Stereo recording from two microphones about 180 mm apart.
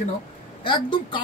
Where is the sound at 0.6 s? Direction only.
25° left (ahead or behind).